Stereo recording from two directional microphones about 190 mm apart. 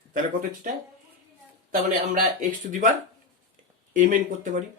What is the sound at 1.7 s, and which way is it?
Speech, 45° right (ahead or behind).